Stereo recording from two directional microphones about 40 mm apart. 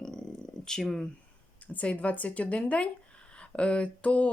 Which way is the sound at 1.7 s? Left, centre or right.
Left.